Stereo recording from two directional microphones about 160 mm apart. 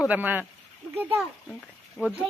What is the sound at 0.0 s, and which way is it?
Speech, 10° right (ahead or behind).